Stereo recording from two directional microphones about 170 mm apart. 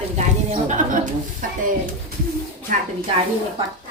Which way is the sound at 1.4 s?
55° right (ahead or behind).